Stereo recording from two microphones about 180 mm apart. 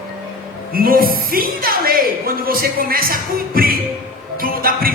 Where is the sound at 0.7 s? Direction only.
55° right (ahead or behind).